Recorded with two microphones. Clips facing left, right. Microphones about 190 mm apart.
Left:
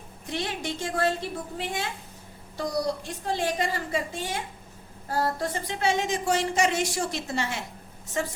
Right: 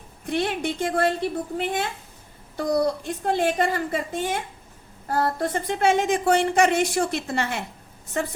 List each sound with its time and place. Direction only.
0.3 s a woman's voice: 55° right (ahead or behind)